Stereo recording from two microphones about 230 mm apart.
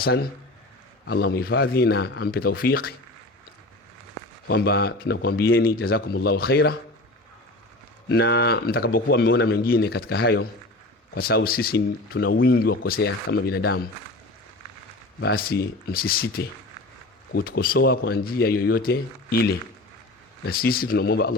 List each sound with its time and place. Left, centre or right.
1.0 s speech: left
4.4 s speech: left
8.1 s speech: left
15.2 s speech: left